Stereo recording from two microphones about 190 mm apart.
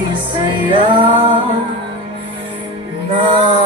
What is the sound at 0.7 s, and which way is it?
Music, 25° right (ahead or behind).